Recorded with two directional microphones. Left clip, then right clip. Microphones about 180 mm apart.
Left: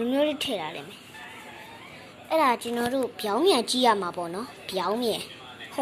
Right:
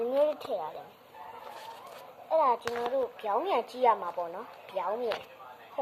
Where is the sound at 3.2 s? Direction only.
15° left (ahead or behind).